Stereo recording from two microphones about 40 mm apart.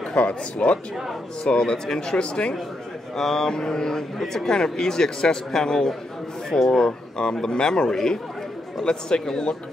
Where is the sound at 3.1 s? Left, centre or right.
Centre.